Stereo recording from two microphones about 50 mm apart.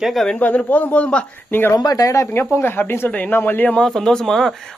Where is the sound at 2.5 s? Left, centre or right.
Left.